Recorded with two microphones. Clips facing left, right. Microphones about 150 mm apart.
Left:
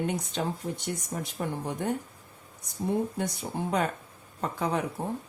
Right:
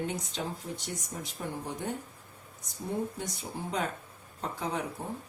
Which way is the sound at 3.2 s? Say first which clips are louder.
Left 6 dB; 55° left (ahead or behind).